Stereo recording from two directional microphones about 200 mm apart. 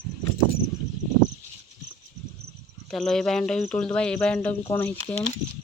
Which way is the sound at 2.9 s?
Centre (ahead or behind).